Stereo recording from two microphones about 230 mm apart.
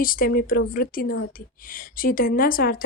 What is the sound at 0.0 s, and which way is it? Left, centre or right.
A woman's voice, left.